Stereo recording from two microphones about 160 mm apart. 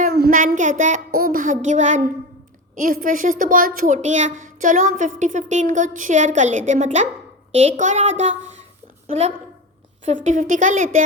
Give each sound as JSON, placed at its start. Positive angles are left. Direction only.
{"t": 0.1, "sound": "child singing", "side_deg": -65}
{"t": 2.8, "sound": "speech", "side_deg": -60}
{"t": 10.1, "sound": "speech", "side_deg": -50}